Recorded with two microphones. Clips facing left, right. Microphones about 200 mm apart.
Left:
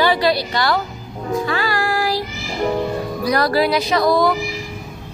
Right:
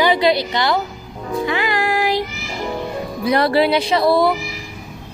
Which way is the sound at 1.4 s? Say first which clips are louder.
Right 4 dB; 20° right (ahead or behind).